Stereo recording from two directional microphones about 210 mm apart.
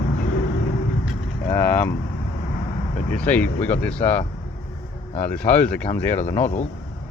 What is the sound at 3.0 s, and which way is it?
Speech, 5° left (ahead or behind).